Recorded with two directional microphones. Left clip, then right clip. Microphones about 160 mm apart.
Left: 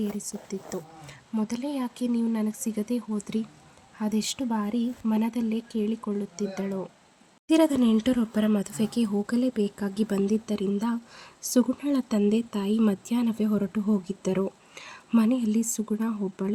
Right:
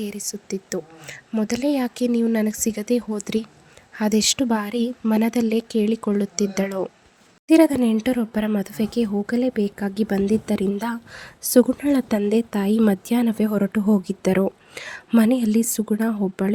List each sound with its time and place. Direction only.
0.0 s a woman's voice: 25° right (ahead or behind)
10.4 s a woman's voice: 40° right (ahead or behind)